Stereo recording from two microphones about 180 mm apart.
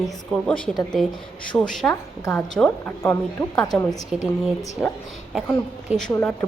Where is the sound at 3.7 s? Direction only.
Centre (ahead or behind).